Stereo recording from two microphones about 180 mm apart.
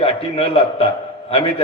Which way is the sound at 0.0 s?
35° left (ahead or behind).